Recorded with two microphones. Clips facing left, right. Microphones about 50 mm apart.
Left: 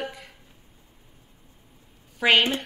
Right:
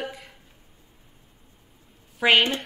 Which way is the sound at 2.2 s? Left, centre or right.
Centre.